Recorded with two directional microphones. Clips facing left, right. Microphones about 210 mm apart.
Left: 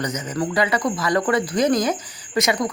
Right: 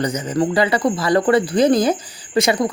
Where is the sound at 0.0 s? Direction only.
30° right (ahead or behind).